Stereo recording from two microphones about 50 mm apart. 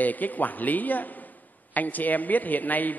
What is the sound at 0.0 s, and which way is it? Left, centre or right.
A woman's voice, left.